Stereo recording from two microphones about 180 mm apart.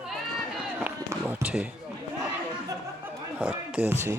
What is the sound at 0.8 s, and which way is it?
Run, 10° right (ahead or behind).